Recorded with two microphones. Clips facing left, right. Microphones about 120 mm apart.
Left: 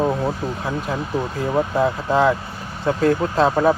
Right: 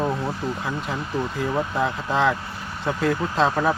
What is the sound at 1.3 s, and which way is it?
Speech, 30° left (ahead or behind).